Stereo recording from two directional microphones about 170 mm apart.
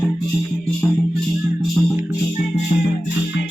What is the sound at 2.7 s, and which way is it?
Music, 50° left (ahead or behind).